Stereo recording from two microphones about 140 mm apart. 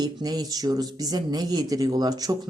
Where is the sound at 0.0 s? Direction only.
30° right (ahead or behind).